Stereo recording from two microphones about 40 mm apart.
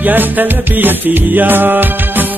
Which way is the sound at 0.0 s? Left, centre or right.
Right.